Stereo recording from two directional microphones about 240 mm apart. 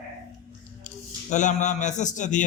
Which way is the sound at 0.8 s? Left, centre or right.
Left.